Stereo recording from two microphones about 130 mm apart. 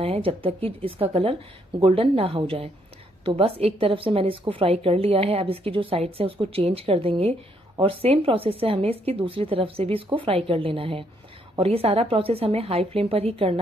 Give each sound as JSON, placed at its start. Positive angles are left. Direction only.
{"t": 0.0, "sound": "speech", "side_deg": -50}